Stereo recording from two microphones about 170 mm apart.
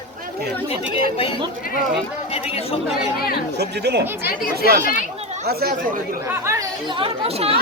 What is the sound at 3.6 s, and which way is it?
Speech, 75° right (ahead or behind).